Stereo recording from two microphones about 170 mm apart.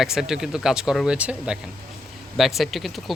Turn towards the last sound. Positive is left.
turn(degrees=0)  # may be behind; listen again after turning